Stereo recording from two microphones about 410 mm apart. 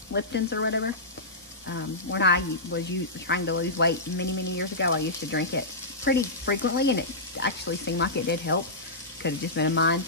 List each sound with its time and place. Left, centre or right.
0.1 s speech: left